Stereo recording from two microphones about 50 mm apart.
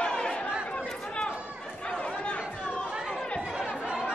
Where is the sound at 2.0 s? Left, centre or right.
Left.